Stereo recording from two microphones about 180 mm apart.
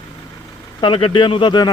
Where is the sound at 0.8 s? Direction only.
30° left (ahead or behind).